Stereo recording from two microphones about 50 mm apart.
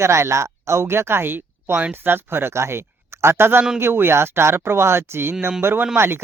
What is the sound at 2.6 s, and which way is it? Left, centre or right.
Speech, right.